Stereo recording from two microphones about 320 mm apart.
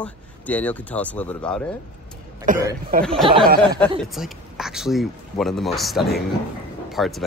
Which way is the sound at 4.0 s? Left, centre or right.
Centre.